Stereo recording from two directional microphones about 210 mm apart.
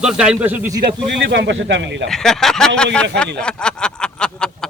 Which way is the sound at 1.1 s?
55° right (ahead or behind).